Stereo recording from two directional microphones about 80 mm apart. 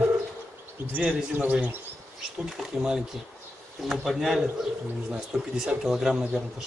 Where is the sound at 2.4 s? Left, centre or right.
Centre.